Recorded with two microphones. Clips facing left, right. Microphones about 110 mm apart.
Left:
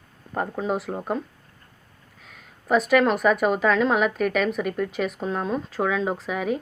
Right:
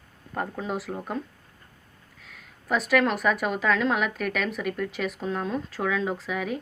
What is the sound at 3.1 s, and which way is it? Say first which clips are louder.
A woman's voice: left 5 dB; 40° left (ahead or behind).